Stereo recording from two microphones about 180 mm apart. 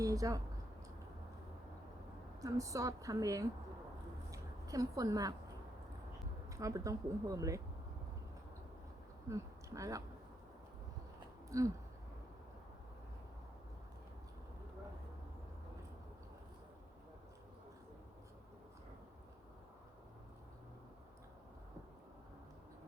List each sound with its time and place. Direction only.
0.0 s speech: 20° right (ahead or behind)
2.4 s a woman's voice: 20° right (ahead or behind)
4.3 s a sound: 20° right (ahead or behind)
6.5 s speech: 20° right (ahead or behind)
9.3 s speech: 20° right (ahead or behind)
11.4 s a sound: 20° right (ahead or behind)